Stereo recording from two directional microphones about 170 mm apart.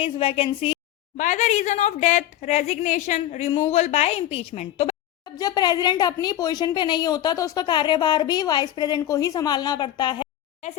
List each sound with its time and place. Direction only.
0.0 s a woman's voice: 35° left (ahead or behind)
1.1 s a woman's voice: 45° left (ahead or behind)
5.2 s speech: 20° left (ahead or behind)
10.6 s a woman's voice: 40° left (ahead or behind)